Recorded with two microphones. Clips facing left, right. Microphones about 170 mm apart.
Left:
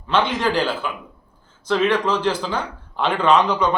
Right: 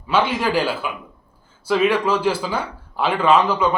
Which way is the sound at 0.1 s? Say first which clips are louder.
Right 1 dB; 10° right (ahead or behind).